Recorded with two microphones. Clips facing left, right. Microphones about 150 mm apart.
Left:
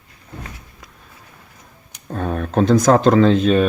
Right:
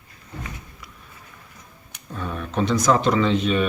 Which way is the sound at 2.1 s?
50° left (ahead or behind).